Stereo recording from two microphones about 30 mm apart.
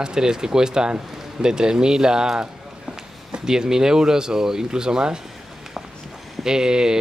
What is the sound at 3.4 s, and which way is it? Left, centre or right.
Speech, centre.